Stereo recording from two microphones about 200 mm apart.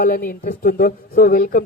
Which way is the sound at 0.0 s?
45° left (ahead or behind).